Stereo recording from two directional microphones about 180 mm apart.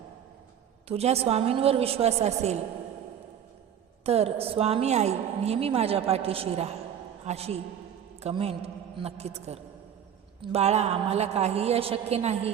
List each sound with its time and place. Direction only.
0.9 s a woman's voice: 35° right (ahead or behind)
4.0 s a woman's voice: 35° right (ahead or behind)